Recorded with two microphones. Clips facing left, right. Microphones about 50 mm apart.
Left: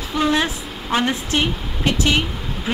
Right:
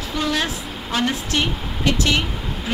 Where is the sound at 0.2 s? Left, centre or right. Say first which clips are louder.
Left 4 dB; left.